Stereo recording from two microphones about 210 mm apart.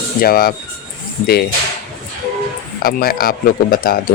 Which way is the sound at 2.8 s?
45° left (ahead or behind).